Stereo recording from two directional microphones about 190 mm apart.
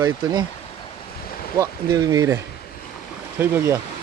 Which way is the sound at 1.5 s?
15° right (ahead or behind).